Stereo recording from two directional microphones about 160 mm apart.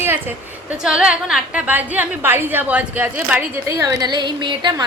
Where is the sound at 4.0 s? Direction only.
25° right (ahead or behind).